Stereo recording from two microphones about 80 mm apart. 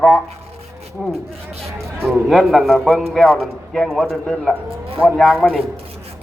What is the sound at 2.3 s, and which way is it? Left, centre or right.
A man's voice, centre.